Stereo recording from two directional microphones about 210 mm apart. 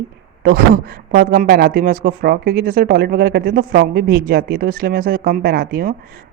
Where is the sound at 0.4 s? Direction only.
45° right (ahead or behind).